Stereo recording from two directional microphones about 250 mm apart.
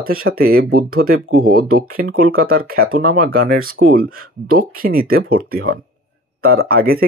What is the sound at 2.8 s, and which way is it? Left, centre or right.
Speech, right.